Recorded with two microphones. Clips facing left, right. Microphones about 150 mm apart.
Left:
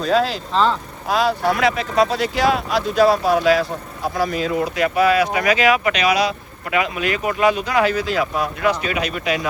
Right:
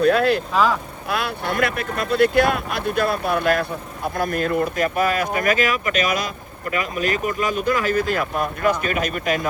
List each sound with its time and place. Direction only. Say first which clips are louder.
0.0 s speech: right 2 dB; 60° right (ahead or behind)